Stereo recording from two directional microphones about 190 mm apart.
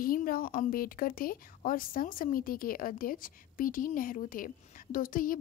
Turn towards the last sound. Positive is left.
turn(degrees=45)  # may be behind; listen again after turning